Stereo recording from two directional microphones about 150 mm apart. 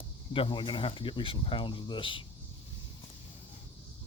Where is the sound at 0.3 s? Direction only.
35° left (ahead or behind).